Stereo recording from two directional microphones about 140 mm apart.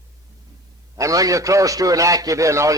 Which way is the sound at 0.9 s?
25° right (ahead or behind).